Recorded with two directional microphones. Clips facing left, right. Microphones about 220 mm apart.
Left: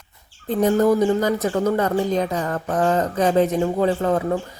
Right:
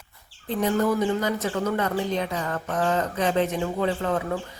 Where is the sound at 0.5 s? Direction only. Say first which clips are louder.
Left 6 dB; 40° left (ahead or behind).